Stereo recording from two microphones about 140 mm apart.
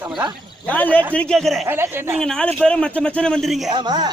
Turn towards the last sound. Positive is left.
turn(degrees=-30)  # may be behind; listen again after turning